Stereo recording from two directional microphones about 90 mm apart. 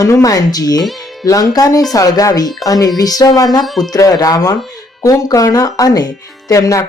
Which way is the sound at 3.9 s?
45° left (ahead or behind).